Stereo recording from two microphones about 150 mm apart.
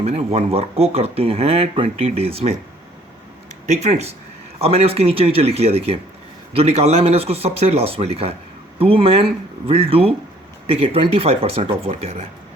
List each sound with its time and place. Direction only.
0.0 s speech: 45° right (ahead or behind)
3.7 s speech: 50° right (ahead or behind)